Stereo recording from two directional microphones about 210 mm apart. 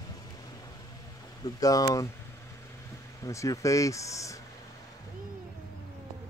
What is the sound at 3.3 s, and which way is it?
Speech, 15° left (ahead or behind).